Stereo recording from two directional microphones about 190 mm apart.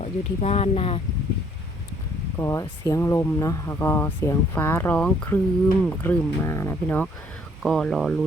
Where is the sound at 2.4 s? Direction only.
15° left (ahead or behind).